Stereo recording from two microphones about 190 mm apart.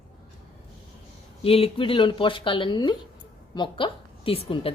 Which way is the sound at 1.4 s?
30° left (ahead or behind).